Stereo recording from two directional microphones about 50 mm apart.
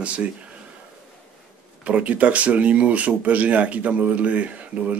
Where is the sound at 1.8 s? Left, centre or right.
Right.